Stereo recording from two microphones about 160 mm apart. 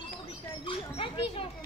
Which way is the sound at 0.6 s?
35° left (ahead or behind).